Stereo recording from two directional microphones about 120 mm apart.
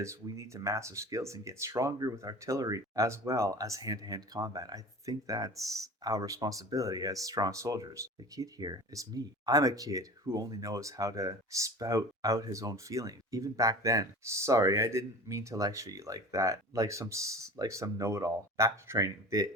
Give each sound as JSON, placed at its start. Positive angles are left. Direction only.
{"t": 0.0, "sound": "speech", "side_deg": -25}